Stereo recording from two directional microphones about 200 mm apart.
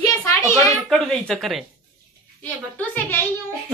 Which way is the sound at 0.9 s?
Centre (ahead or behind).